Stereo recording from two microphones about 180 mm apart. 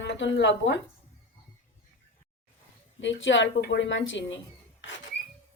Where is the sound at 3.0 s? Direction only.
90° left.